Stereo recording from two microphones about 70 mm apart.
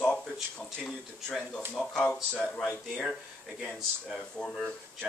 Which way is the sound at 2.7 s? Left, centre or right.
Centre.